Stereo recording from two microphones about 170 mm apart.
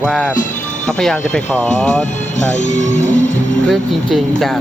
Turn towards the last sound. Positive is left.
turn(degrees=0)  # may be behind; listen again after turning